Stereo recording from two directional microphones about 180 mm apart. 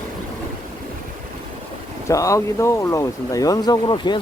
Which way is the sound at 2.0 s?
15° left (ahead or behind).